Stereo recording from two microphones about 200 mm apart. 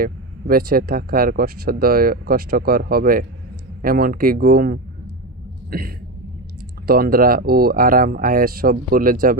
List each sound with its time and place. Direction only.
0.0 s speech: 45° right (ahead or behind)